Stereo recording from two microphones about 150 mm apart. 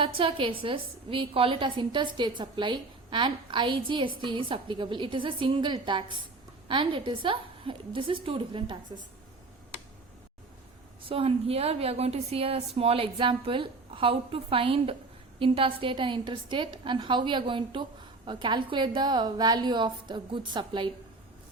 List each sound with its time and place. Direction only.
0.0 s a woman's voice: 35° right (ahead or behind)
11.0 s a woman's voice: 40° right (ahead or behind)